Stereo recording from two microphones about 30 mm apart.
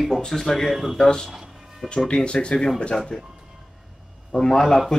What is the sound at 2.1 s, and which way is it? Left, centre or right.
Speech, left.